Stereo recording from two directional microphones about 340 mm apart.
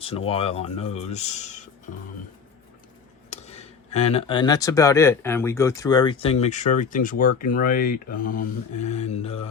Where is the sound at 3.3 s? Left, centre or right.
Centre.